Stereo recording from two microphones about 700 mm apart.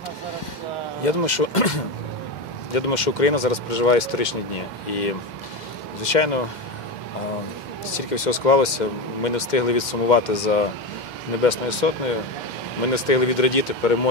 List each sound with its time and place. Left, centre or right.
1.0 s speech: left
2.7 s speech: left
6.0 s speech: left
8.1 s speech: left
12.9 s speech: left